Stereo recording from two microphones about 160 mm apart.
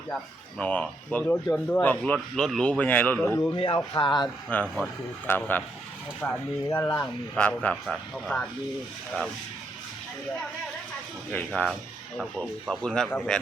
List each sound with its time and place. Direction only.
0.6 s speech: 10° left (ahead or behind)
3.5 s speech: 35° left (ahead or behind)
4.5 s speech: 10° left (ahead or behind)
11.3 s speech: 10° left (ahead or behind)
11.6 s speech: 5° right (ahead or behind)